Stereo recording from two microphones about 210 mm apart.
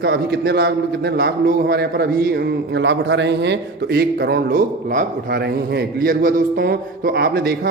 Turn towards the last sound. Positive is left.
turn(degrees=-45)  # may be behind; listen again after turning